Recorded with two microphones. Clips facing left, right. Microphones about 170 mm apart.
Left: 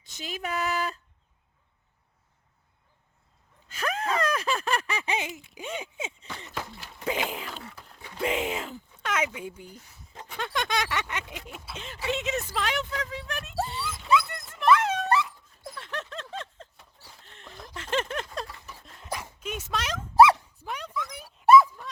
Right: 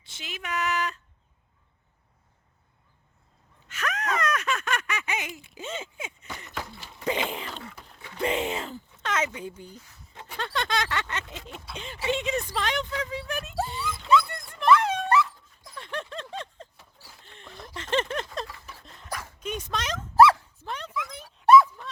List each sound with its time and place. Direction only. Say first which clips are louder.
0.0 s speech: left 5 dB; 40° left (ahead or behind)
3.7 s gasp: left 1 dB; 30° left (ahead or behind)
5.5 s speech: even; 15° left (ahead or behind)
14.0 s dog: right 2 dB; 5° left (ahead or behind)
15.7 s a sound: right 2 dB; centre (ahead or behind)
19.0 s dog: left 1 dB; 20° left (ahead or behind)
19.4 s dog: right 2 dB; 5° left (ahead or behind)
20.7 s a sound: even; 10° left (ahead or behind)
21.2 s dog: even; 5° left (ahead or behind)